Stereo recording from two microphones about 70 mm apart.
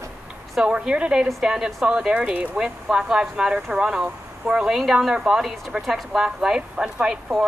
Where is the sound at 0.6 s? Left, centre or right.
Centre.